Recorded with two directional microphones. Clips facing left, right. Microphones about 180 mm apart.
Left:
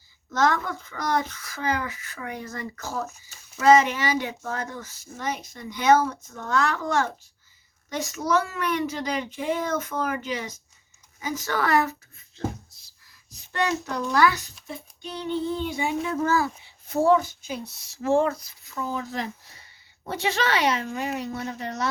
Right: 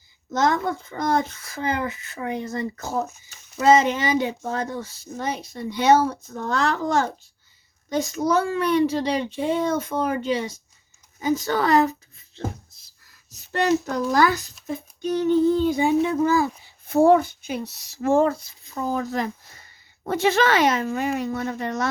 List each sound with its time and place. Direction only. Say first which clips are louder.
0.3 s speech: right 2 dB; 20° right (ahead or behind)
13.9 s a child's voice: right 2 dB; 35° right (ahead or behind)
16.1 s speech: right 4 dB; 15° right (ahead or behind)
16.8 s speech: right 4 dB; 55° right (ahead or behind)
18.0 s speech: right 3 dB; 45° right (ahead or behind)
18.3 s speech: right 3 dB; 25° right (ahead or behind)
18.7 s speech: right 5 dB; 40° right (ahead or behind)